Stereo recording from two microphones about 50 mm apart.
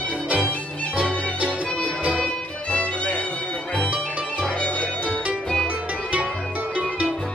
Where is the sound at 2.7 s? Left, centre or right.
Left.